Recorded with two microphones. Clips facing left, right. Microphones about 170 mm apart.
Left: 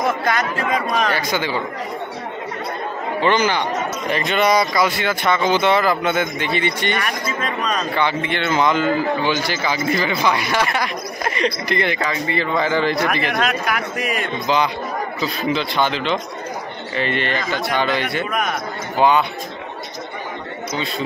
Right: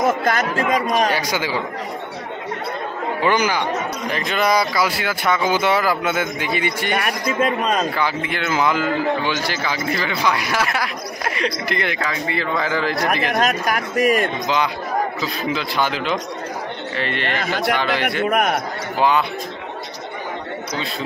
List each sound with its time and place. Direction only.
0.6 s speech: 45° right (ahead or behind)
1.1 s speech: 10° right (ahead or behind)
3.2 s a man's voice: 10° right (ahead or behind)
13.4 s speech: 40° right (ahead or behind)
15.1 s a man's voice: 5° right (ahead or behind)
18.2 s a man's voice: 65° right (ahead or behind)
18.9 s a man's voice: centre (ahead or behind)